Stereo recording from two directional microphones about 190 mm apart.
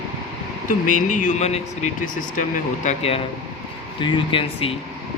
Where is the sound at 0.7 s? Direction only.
45° left (ahead or behind); by 4.7 s 30° left (ahead or behind).